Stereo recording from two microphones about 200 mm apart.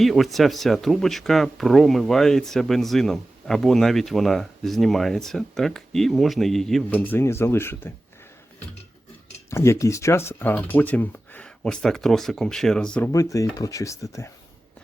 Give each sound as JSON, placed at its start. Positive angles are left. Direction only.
{"t": 0.0, "sound": "speech", "side_deg": 0}
{"t": 9.5, "sound": "speech", "side_deg": 15}
{"t": 13.1, "sound": "speech", "side_deg": 15}